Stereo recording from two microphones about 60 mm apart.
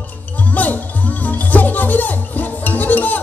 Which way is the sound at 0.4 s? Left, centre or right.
Left.